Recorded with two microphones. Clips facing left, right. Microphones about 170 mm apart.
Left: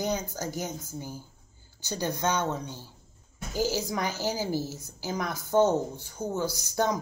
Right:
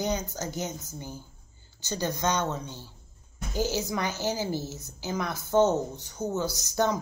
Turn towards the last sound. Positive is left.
turn(degrees=10)  # may be behind; listen again after turning